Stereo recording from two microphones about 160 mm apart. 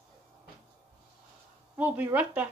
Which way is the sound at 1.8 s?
10° right (ahead or behind).